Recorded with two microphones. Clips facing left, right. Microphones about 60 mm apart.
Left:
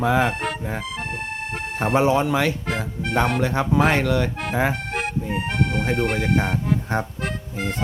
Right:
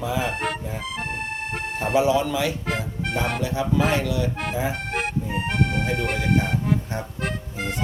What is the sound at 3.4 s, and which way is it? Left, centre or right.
Speech, left.